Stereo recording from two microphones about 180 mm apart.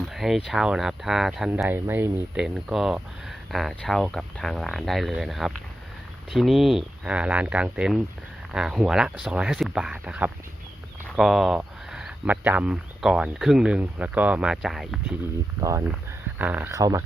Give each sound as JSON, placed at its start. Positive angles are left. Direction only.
{"t": 0.1, "sound": "speech", "side_deg": 0}
{"t": 15.6, "sound": "speech", "side_deg": -15}